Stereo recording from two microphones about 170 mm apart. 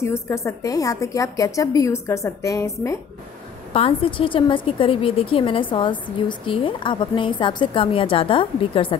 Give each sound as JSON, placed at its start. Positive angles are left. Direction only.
{"t": 0.0, "sound": "a woman's voice", "side_deg": 15}
{"t": 3.7, "sound": "a woman's voice", "side_deg": 35}